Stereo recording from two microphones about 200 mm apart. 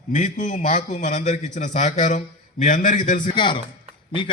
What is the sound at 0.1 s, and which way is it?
A man's voice, 40° left (ahead or behind).